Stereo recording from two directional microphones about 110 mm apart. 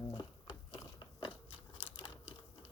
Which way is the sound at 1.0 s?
45° left (ahead or behind).